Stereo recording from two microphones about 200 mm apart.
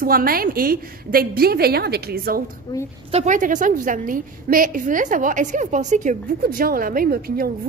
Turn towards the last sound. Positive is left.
turn(degrees=-45)  # may be behind; listen again after turning